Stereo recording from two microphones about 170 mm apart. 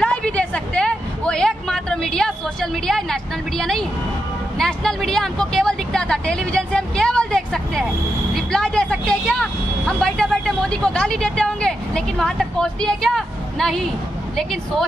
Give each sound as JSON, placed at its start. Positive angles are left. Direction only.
{"t": 0.0, "sound": "a sound", "side_deg": 5}
{"t": 8.4, "sound": "vehicle", "side_deg": 5}
{"t": 14.3, "sound": "speech", "side_deg": 0}